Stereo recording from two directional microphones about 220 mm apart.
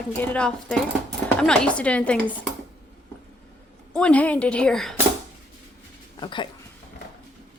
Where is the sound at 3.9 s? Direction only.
5° left (ahead or behind).